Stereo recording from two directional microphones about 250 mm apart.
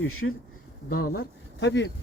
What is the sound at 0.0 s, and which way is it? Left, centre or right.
Speech, left.